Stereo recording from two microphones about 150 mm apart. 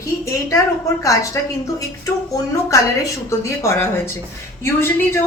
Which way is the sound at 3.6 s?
15° left (ahead or behind).